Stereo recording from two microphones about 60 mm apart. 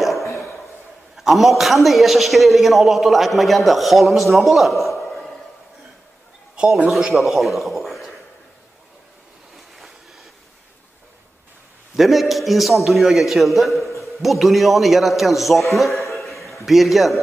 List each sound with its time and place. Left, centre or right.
0.0 s a sound: centre
1.1 s a man's voice: centre
6.6 s a man's voice: centre
6.9 s a man's voice: centre
9.8 s a sound: centre
11.9 s a man's voice: centre